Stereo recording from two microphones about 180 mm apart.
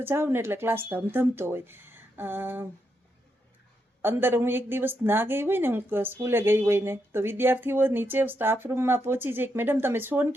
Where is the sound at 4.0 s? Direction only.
10° right (ahead or behind).